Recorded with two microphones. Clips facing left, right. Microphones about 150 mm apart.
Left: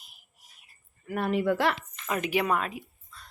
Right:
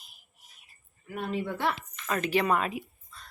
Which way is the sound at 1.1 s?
75° left (ahead or behind).